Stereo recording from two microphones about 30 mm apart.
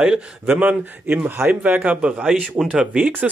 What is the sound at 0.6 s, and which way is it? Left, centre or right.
A man's voice, right.